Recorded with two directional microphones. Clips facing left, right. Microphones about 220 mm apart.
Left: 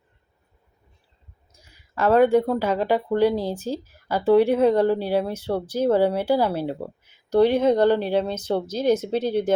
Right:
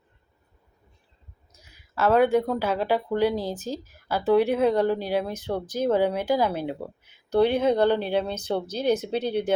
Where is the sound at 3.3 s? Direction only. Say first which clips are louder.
Left 3 dB; 10° left (ahead or behind).